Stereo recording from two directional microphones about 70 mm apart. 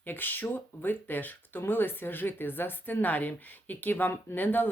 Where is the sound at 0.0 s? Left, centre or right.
Left.